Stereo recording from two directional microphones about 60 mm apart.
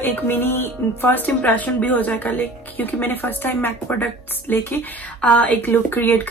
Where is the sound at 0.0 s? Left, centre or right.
Left.